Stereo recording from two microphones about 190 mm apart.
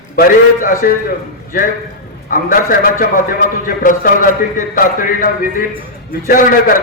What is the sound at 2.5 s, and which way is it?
A man's voice, 45° left (ahead or behind).